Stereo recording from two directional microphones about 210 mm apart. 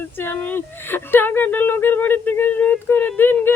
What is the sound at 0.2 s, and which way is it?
Speech, 10° left (ahead or behind).